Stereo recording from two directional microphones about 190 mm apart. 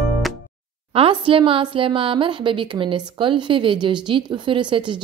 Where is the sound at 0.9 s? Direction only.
30° right (ahead or behind).